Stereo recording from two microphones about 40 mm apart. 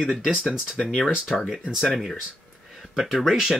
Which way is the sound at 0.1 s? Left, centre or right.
Centre.